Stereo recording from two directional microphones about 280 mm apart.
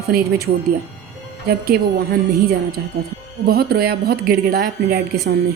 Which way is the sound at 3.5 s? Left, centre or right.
Right.